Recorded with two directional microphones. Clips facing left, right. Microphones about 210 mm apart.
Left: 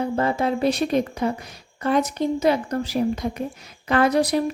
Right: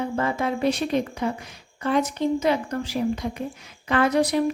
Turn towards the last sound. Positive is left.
turn(degrees=35)  # may be behind; listen again after turning